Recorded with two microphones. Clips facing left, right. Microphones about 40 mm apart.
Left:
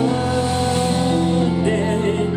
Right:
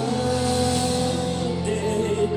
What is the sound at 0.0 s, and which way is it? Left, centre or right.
Music, left.